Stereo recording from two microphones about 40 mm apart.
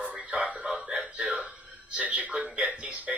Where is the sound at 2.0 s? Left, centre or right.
Right.